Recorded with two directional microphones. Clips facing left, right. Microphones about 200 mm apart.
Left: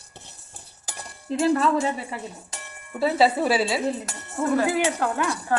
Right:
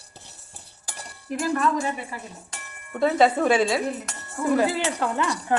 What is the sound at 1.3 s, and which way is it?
Speech, 25° left (ahead or behind).